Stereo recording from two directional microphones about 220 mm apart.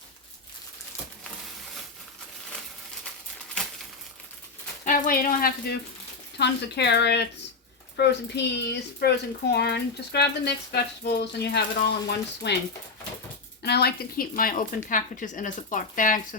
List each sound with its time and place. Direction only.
3.6 s crumpling: 5° left (ahead or behind)
4.9 s speech: 40° left (ahead or behind)
13.6 s a woman's voice: 45° left (ahead or behind)